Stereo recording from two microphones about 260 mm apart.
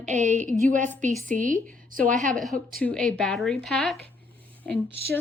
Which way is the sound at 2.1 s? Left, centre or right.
Centre.